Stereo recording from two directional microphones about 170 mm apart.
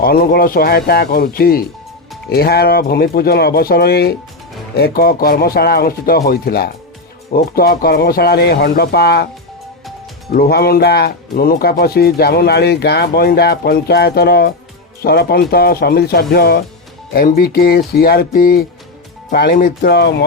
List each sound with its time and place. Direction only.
0.0 s speech: 65° left (ahead or behind)
10.3 s speech: 65° left (ahead or behind); by 20.2 s 85° left